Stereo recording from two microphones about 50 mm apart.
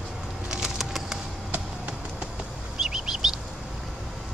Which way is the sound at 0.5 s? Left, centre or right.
Centre.